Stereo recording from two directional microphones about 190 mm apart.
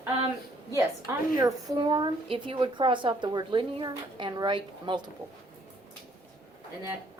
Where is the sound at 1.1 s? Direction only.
15° right (ahead or behind).